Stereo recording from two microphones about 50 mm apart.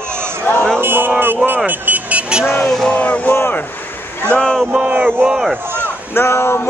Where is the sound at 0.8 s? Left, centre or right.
Right.